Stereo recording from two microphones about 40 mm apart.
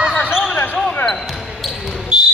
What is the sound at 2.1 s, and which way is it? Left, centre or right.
Music, right.